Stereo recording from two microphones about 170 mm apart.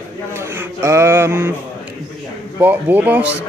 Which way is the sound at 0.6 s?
15° right (ahead or behind).